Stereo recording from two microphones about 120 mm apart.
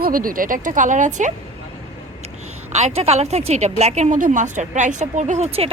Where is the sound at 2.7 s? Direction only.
70° right (ahead or behind).